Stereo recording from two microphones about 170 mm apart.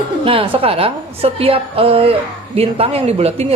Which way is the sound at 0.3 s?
35° right (ahead or behind).